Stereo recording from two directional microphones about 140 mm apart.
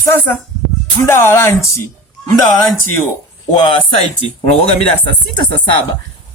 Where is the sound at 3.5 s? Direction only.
35° left (ahead or behind).